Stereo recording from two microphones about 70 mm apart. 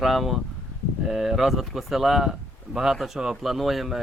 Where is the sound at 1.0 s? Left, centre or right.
Centre.